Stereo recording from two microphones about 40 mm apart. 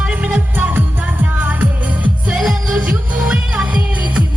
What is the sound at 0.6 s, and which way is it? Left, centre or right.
Music, right.